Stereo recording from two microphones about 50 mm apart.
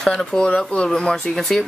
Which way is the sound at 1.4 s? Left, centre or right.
Centre.